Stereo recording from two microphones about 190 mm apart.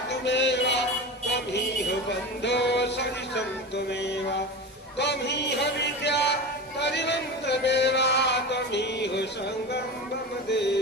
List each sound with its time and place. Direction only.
0.1 s music: 65° left (ahead or behind)
4.9 s a sound: 65° left (ahead or behind)
10.5 s music: 65° left (ahead or behind)